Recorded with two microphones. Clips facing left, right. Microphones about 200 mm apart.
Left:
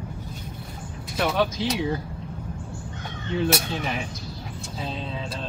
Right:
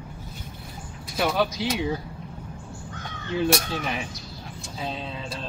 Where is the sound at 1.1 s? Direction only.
Centre (ahead or behind).